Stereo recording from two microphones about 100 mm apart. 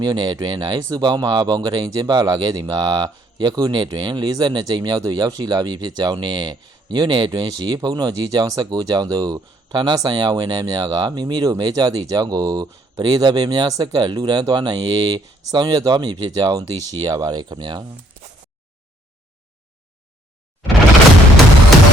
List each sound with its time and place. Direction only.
0.0 s speech: 45° right (ahead or behind)